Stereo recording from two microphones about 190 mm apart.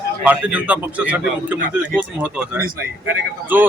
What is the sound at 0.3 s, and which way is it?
A man's voice, 5° right (ahead or behind).